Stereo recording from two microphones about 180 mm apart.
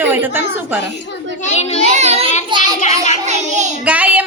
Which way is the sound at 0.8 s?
75° left (ahead or behind).